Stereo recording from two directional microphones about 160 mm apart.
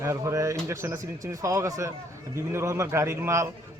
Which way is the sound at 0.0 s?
20° right (ahead or behind).